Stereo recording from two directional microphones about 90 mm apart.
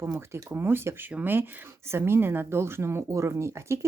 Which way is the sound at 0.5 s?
25° right (ahead or behind).